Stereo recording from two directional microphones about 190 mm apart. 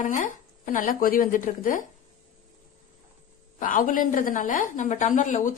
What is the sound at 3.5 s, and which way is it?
A woman's voice, 45° left (ahead or behind).